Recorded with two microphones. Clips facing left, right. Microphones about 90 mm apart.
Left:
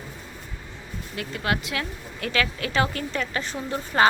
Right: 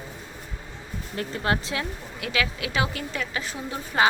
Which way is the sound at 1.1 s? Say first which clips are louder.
Right 1 dB; 30° right (ahead or behind).